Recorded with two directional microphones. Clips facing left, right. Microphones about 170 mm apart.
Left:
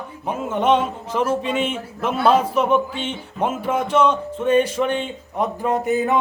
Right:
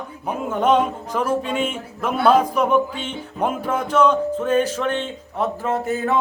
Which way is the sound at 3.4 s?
5° left (ahead or behind).